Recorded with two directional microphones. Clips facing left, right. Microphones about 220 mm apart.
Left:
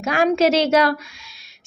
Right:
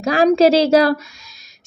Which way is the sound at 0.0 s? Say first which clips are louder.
Right 5 dB; 35° right (ahead or behind).